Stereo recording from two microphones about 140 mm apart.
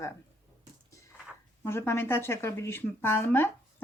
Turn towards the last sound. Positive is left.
turn(degrees=15)  # may be behind; listen again after turning